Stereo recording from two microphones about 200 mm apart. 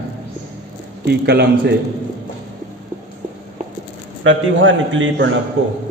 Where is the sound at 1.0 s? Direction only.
55° right (ahead or behind).